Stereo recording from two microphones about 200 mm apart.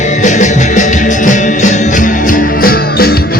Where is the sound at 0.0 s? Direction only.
35° left (ahead or behind).